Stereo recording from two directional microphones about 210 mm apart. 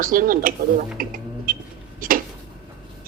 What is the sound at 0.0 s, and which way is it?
Speech, 40° right (ahead or behind).